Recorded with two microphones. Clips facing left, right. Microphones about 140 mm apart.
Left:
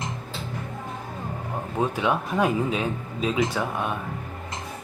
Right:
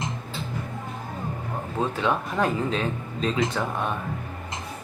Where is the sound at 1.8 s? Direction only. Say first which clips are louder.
Left 1 dB; 10° left (ahead or behind).